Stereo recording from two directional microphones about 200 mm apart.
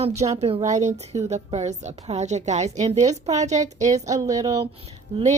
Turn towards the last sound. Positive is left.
turn(degrees=-30)  # may be behind; listen again after turning